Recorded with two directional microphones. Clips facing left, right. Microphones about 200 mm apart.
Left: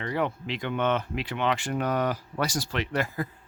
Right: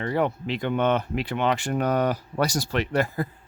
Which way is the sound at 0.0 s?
40° right (ahead or behind).